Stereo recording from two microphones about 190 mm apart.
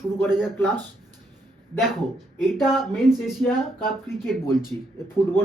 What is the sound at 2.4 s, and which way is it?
Speech, centre (ahead or behind).